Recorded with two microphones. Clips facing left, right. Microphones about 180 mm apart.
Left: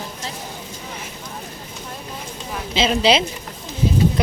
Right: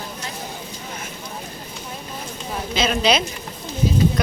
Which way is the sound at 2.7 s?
30° left (ahead or behind).